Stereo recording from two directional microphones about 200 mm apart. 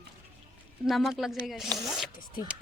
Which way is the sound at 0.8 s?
Centre (ahead or behind).